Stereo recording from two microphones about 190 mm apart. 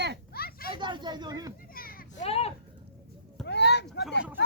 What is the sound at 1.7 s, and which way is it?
Children playing, 50° left (ahead or behind).